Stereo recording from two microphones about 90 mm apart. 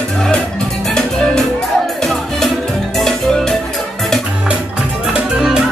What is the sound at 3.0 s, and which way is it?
Music, 5° left (ahead or behind).